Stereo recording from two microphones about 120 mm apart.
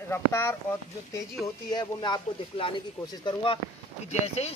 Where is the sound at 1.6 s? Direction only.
35° left (ahead or behind).